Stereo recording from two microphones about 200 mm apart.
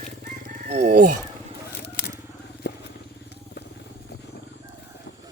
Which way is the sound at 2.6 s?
55° left (ahead or behind).